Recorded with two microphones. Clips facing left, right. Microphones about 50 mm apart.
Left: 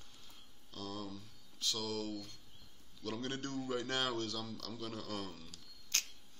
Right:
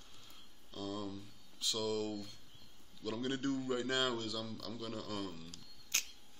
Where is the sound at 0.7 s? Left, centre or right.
Centre.